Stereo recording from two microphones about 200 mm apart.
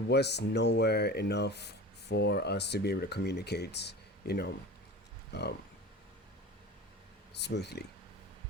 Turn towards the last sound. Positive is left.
turn(degrees=55)  # may be behind; listen again after turning